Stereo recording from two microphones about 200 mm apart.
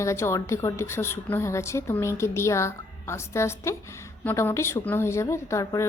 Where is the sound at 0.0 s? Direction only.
15° left (ahead or behind).